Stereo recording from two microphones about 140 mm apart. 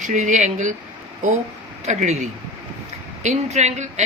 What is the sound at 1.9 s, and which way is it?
A woman's voice, 55° right (ahead or behind).